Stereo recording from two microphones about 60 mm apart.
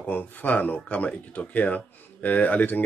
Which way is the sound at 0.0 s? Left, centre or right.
Left.